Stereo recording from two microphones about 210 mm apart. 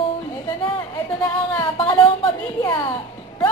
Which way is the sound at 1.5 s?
20° left (ahead or behind).